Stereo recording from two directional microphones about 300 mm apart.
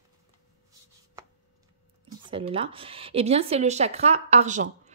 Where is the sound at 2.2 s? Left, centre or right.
Centre.